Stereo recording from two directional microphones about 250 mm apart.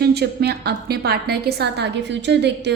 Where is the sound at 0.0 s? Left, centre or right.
Right.